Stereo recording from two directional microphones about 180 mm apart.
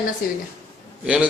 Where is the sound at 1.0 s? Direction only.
5° right (ahead or behind).